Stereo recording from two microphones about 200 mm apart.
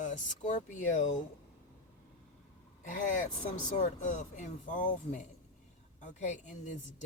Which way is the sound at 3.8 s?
35° left (ahead or behind).